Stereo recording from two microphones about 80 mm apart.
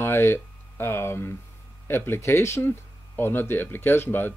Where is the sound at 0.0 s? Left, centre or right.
Left.